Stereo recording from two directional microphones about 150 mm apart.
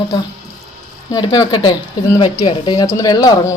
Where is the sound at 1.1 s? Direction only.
30° left (ahead or behind).